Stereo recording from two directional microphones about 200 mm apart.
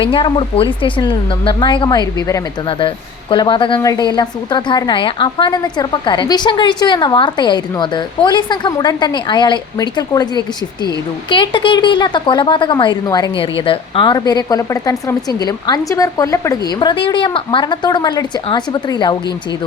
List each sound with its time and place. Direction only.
0.0 s a woman's voice: 25° left (ahead or behind)